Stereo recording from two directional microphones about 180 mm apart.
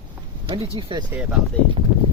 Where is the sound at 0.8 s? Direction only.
25° right (ahead or behind).